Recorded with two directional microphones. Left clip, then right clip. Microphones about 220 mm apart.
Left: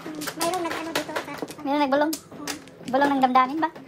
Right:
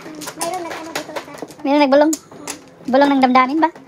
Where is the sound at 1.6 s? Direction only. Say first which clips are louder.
Right 9 dB; 35° right (ahead or behind).